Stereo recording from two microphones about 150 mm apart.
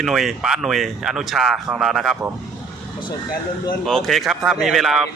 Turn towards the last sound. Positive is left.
turn(degrees=0)  # may be behind; listen again after turning